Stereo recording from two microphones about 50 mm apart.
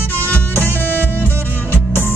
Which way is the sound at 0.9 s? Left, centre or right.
Left.